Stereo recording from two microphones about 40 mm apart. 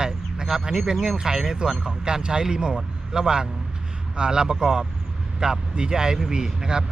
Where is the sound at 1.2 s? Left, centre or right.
Centre.